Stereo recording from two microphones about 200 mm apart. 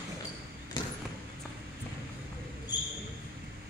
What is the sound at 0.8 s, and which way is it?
Basketball bounce, 20° left (ahead or behind).